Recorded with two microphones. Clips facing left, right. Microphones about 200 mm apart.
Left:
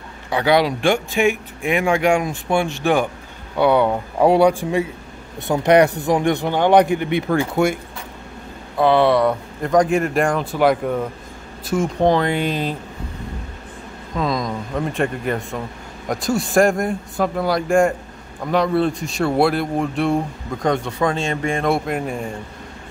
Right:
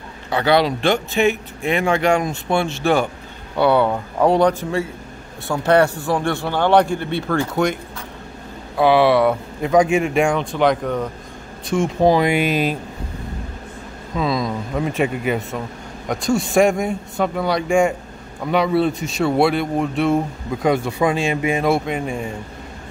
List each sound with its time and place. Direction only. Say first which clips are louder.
0.3 s speech: even; 10° left (ahead or behind)
8.7 s speech: right 1 dB; 5° right (ahead or behind)
14.1 s speech: right 1 dB; 5° right (ahead or behind)